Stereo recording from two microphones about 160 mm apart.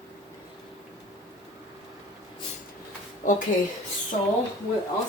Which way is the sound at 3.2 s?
55° left (ahead or behind).